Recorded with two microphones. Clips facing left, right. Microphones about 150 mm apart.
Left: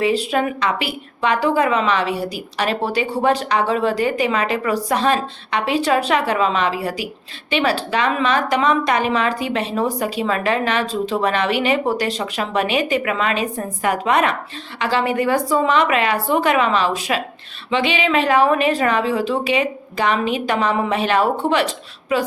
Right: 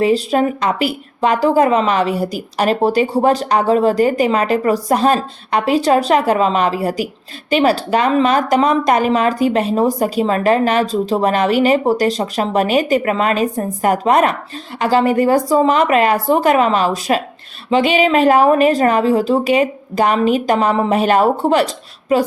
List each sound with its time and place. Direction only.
0.0 s a woman's voice: 40° right (ahead or behind)